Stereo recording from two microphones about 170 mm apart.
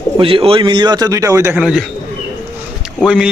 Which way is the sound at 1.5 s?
5° right (ahead or behind).